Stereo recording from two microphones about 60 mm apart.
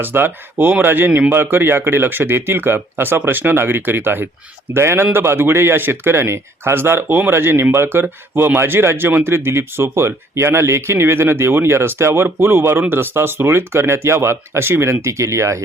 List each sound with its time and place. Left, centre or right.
0.0 s speech: right
4.7 s speech: right